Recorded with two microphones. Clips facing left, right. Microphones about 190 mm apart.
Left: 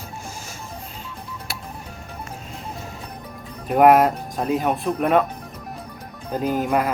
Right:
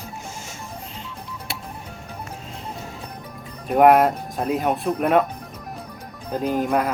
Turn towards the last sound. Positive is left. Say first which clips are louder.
# even
turn(degrees=0)  # may be behind; listen again after turning